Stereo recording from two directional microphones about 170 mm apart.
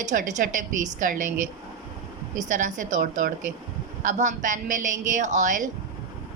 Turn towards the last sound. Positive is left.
turn(degrees=-45)  # may be behind; listen again after turning